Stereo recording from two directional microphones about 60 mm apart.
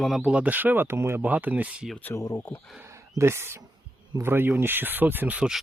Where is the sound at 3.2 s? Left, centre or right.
Right.